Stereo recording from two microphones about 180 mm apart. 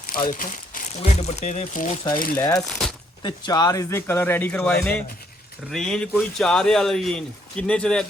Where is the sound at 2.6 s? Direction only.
5° left (ahead or behind).